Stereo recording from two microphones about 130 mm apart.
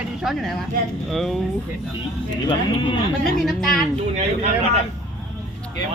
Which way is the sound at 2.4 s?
40° left (ahead or behind).